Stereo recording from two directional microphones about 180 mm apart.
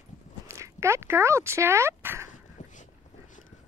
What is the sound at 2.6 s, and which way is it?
Dog, 45° left (ahead or behind).